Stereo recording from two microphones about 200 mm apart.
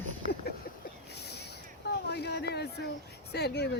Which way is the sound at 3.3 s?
55° left (ahead or behind).